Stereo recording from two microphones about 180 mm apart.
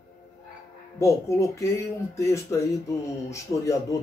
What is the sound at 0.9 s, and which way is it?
Speech, 15° left (ahead or behind).